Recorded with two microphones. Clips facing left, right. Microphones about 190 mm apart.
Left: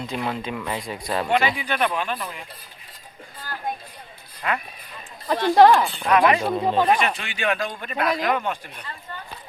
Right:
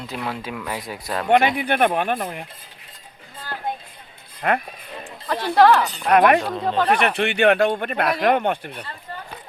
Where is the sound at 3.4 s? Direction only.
25° right (ahead or behind).